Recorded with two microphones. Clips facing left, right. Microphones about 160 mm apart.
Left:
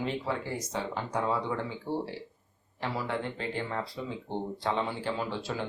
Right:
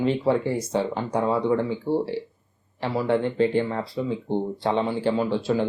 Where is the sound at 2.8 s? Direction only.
30° right (ahead or behind).